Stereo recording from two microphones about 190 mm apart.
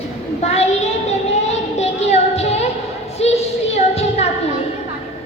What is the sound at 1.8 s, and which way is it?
Music, 35° left (ahead or behind).